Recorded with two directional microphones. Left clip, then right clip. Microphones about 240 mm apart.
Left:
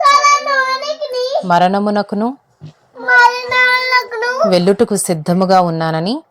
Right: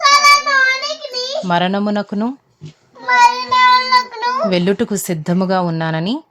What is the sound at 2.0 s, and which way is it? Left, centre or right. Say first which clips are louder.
Speech: left 4 dB; centre.